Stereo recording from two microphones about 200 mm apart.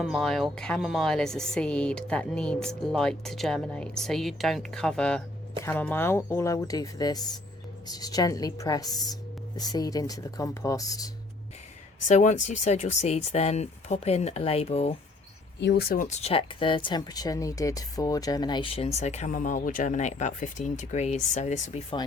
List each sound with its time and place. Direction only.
0.0 s a woman's voice: centre (ahead or behind); by 11.1 s 15° left (ahead or behind)
12.0 s speech: 35° left (ahead or behind)
15.6 s speech: 55° left (ahead or behind); by 22.0 s 30° left (ahead or behind)